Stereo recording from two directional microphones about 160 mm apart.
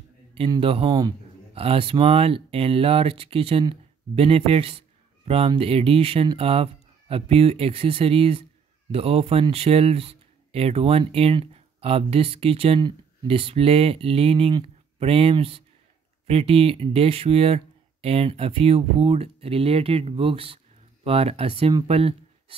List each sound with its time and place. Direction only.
0.6 s speech: 35° right (ahead or behind)